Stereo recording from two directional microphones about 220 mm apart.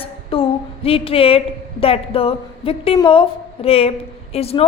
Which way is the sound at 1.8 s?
25° left (ahead or behind).